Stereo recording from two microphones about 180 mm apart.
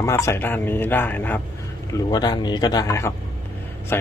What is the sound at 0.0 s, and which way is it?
Speech, 15° left (ahead or behind).